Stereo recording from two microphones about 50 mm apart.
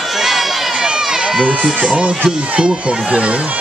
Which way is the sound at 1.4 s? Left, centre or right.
Right.